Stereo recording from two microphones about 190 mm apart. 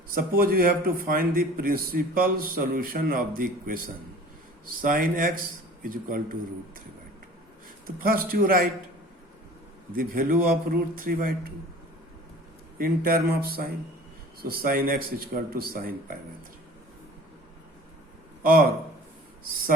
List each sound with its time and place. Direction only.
0.1 s a man's voice: 50° right (ahead or behind)
7.9 s a man's voice: 50° right (ahead or behind)
9.9 s a man's voice: 50° right (ahead or behind)
12.8 s a man's voice: 50° right (ahead or behind)
18.4 s a man's voice: 50° right (ahead or behind)